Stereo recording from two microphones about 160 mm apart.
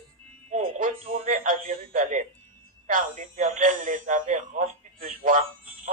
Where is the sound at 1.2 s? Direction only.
55° right (ahead or behind).